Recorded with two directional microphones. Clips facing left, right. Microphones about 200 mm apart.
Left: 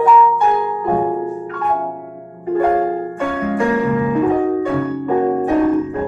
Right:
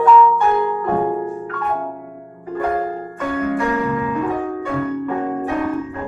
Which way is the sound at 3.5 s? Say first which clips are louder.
Left 4 dB; 30° left (ahead or behind).